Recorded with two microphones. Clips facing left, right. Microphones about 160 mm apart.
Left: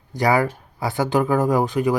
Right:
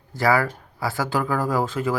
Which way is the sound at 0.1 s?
20° left (ahead or behind).